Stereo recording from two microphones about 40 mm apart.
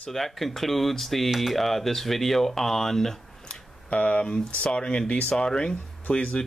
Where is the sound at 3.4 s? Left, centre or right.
Left.